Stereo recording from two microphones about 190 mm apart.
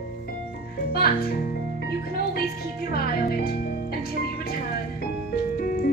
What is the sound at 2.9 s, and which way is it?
Speech, 55° left (ahead or behind).